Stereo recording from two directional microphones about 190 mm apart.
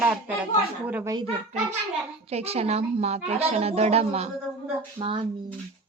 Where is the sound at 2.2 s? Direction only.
35° right (ahead or behind).